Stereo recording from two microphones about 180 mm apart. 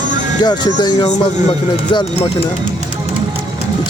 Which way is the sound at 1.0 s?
30° left (ahead or behind).